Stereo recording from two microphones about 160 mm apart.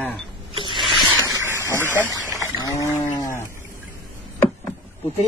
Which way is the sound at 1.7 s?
15° left (ahead or behind).